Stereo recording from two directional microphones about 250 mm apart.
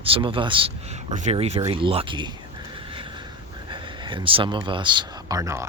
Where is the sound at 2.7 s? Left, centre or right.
Right.